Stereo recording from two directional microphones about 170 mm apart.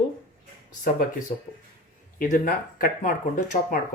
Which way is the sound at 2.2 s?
55° left (ahead or behind).